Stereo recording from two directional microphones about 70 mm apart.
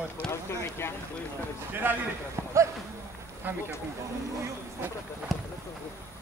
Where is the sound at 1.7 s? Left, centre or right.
Right.